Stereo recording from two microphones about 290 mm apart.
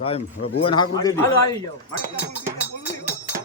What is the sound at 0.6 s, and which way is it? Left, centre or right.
Speech, centre.